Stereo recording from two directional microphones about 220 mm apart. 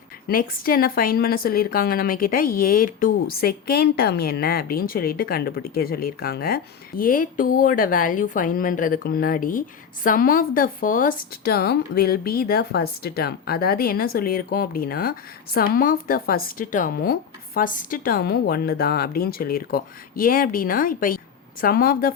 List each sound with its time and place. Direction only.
0.3 s a woman's voice: 40° left (ahead or behind)